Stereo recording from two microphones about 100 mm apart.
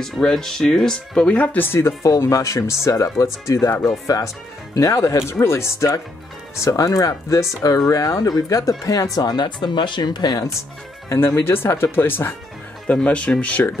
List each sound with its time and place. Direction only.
0.0 s speech: 5° left (ahead or behind); by 10.5 s 45° left (ahead or behind)
11.1 s speech: 25° left (ahead or behind)